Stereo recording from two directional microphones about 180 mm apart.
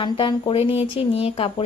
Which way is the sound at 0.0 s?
25° left (ahead or behind).